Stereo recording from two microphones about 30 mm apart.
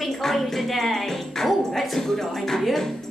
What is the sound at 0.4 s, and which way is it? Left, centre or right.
Music, centre.